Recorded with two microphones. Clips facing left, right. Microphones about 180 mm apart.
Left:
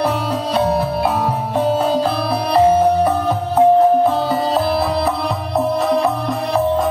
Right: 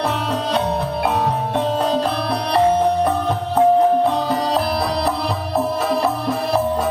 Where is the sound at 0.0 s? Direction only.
10° left (ahead or behind).